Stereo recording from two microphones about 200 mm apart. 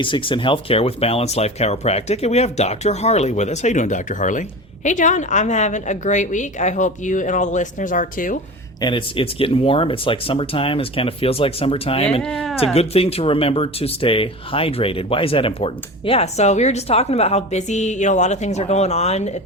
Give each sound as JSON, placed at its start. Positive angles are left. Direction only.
{"t": 0.0, "sound": "speech", "side_deg": 25}
{"t": 8.8, "sound": "speech", "side_deg": 25}
{"t": 12.2, "sound": "speech", "side_deg": 0}
{"t": 12.7, "sound": "speech", "side_deg": 30}